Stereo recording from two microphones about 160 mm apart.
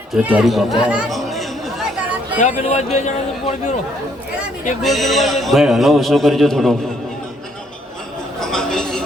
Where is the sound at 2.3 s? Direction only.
50° left (ahead or behind).